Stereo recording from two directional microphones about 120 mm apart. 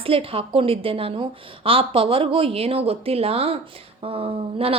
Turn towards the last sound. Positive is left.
turn(degrees=-55)  # may be behind; listen again after turning